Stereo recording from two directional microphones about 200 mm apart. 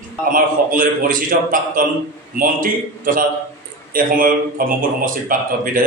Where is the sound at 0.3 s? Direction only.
45° right (ahead or behind).